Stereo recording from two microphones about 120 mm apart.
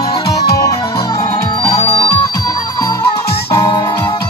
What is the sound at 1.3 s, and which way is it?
Music, 60° left (ahead or behind).